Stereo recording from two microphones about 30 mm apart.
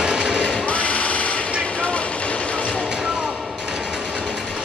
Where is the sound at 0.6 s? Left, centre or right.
Left.